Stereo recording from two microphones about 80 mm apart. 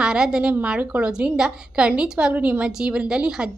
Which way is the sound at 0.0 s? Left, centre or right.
Centre.